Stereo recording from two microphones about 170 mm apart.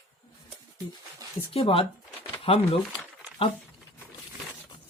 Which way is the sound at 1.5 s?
35° left (ahead or behind).